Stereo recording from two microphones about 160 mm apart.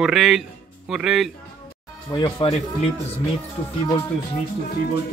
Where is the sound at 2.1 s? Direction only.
30° left (ahead or behind).